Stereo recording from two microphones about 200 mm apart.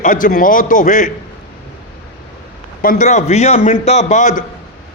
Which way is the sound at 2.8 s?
40° left (ahead or behind).